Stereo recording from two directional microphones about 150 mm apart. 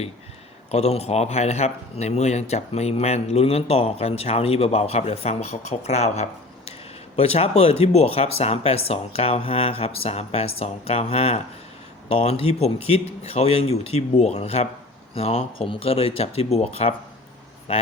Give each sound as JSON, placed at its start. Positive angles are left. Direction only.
{"t": 0.7, "sound": "speech", "side_deg": 45}